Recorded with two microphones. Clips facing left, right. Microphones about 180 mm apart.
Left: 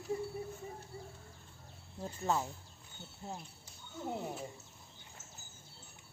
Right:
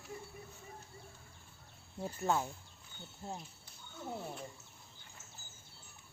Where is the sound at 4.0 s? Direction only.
15° left (ahead or behind).